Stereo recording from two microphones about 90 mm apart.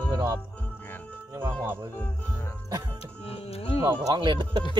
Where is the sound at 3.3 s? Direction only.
90° left.